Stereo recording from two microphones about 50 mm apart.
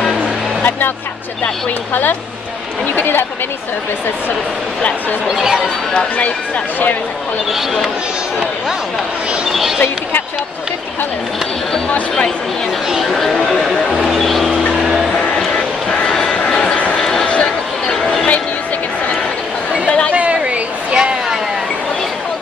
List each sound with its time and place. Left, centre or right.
0.7 s speech: left
3.0 s speech: left
5.3 s speech: centre
9.5 s speech: centre
13.1 s speech: centre
15.1 s a sound: centre
16.1 s vehicle: centre
16.9 s a sound: centre
20.1 s a sound: right